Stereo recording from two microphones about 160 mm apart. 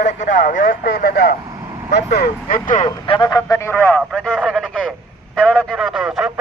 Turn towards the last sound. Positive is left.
turn(degrees=0)  # may be behind; listen again after turning